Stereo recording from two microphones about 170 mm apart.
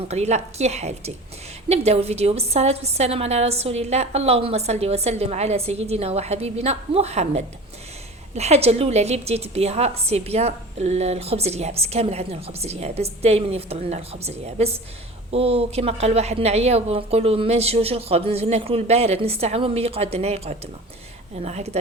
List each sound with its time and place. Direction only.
0.1 s a woman's voice: 40° right (ahead or behind)